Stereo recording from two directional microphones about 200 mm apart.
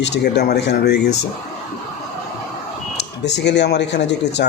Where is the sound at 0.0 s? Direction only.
55° left (ahead or behind).